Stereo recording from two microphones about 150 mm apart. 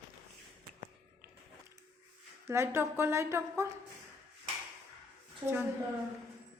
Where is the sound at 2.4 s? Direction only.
20° right (ahead or behind).